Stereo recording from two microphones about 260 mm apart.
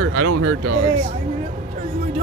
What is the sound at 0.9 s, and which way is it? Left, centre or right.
Speech, right.